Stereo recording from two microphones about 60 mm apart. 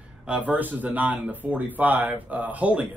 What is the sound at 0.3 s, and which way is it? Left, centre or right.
Speech, right.